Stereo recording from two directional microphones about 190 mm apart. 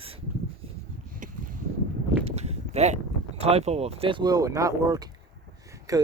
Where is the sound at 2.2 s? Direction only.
35° right (ahead or behind).